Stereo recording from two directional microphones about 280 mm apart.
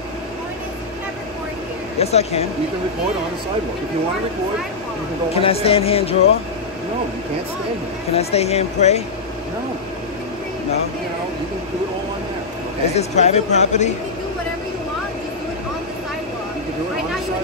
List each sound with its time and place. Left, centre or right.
2.0 s speech: left
5.3 s speech: left
8.1 s speech: left
12.9 s speech: left